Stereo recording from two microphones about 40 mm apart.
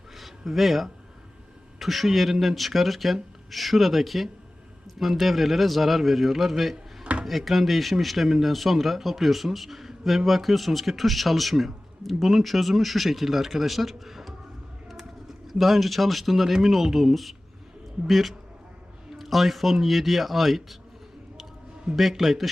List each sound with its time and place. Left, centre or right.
0.2 s a sound: centre
1.8 s a man's voice: centre
7.0 s dishes: right
7.3 s a man's voice: centre
21.9 s a man's voice: centre